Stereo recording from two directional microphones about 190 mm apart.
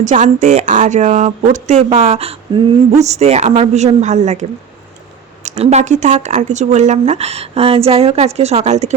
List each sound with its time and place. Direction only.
0.0 s speech: 40° right (ahead or behind)
5.5 s speech: 35° right (ahead or behind)